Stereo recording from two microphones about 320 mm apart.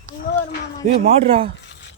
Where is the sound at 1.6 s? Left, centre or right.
Left.